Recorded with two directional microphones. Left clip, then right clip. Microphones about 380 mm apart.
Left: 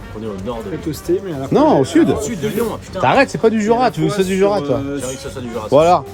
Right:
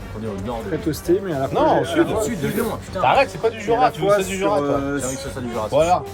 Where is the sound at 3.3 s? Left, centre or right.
Left.